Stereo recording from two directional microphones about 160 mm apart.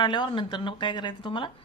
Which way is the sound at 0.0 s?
30° left (ahead or behind).